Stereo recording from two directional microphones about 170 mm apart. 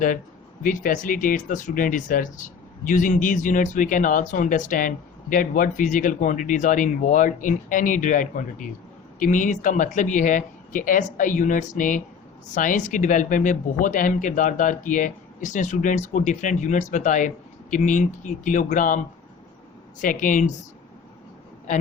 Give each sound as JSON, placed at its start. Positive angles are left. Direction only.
{"t": 0.6, "sound": "speech", "side_deg": 55}
{"t": 20.0, "sound": "speech", "side_deg": 50}